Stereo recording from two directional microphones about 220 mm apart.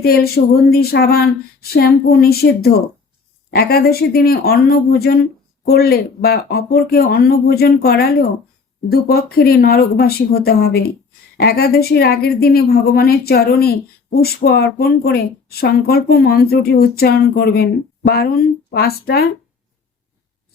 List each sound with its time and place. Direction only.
0.0 s a woman's voice: 45° left (ahead or behind)